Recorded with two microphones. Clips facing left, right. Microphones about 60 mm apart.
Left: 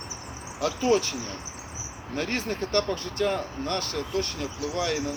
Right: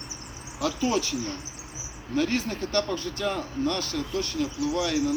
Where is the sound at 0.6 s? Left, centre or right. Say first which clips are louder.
Left 2 dB; left.